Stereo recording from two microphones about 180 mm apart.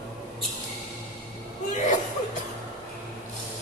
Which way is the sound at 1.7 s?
45° left (ahead or behind).